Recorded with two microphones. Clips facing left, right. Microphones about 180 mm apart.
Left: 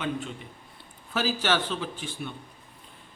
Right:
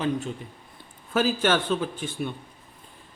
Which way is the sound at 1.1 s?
50° right (ahead or behind).